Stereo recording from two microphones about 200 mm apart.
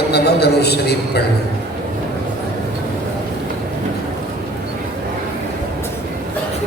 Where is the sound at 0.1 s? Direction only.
55° left (ahead or behind).